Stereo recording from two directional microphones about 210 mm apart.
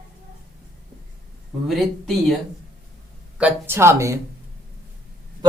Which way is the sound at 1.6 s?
Centre (ahead or behind).